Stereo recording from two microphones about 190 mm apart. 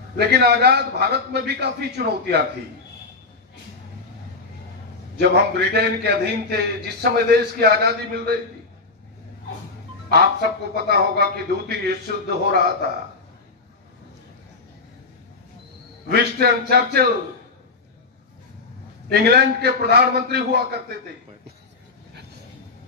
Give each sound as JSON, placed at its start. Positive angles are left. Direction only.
{"t": 0.2, "sound": "a man's voice", "side_deg": -55}
{"t": 5.2, "sound": "a man's voice", "side_deg": -55}
{"t": 10.1, "sound": "a man's voice", "side_deg": -55}
{"t": 16.1, "sound": "a man's voice", "side_deg": -55}
{"t": 19.0, "sound": "a man's voice", "side_deg": -60}